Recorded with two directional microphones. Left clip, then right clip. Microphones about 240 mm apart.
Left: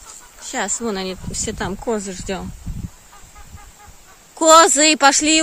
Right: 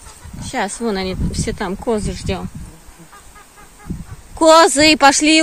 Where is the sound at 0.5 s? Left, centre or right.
Centre.